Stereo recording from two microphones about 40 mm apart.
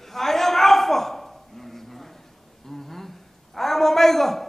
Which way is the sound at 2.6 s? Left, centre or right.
Centre.